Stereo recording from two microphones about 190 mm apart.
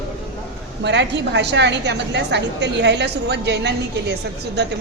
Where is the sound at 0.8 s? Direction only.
65° right (ahead or behind).